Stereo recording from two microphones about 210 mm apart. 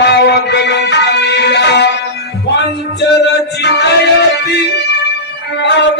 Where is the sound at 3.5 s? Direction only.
50° left (ahead or behind).